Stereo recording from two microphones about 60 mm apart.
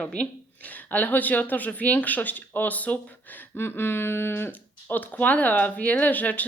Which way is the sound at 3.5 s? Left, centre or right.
Left.